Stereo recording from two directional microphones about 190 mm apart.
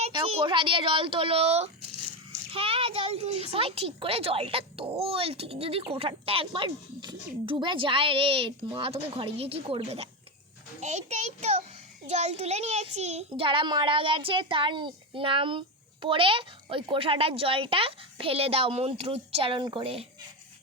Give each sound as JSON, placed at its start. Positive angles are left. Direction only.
{"t": 0.0, "sound": "a child's voice", "side_deg": -30}